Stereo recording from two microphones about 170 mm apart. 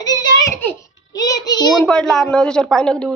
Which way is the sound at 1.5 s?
25° left (ahead or behind).